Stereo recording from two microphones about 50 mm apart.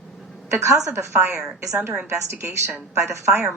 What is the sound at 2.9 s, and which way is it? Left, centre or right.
Speech, right.